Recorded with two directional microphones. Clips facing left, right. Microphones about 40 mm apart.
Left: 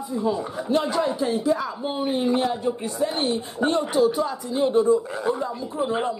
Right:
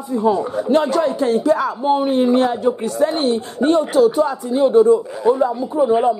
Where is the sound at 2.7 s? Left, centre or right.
Centre.